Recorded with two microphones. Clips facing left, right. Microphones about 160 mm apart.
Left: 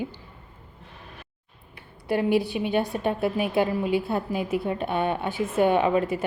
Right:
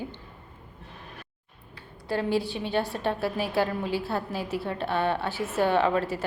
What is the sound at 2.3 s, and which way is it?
Speech, 60° left (ahead or behind).